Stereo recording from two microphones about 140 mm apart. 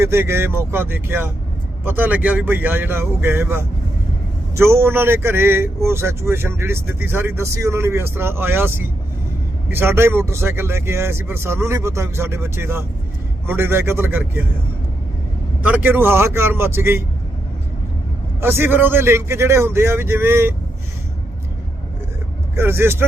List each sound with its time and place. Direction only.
0.0 s a man's voice: 20° right (ahead or behind)
15.6 s a man's voice: 10° right (ahead or behind)
18.3 s a man's voice: 15° right (ahead or behind)
22.5 s a man's voice: 15° right (ahead or behind)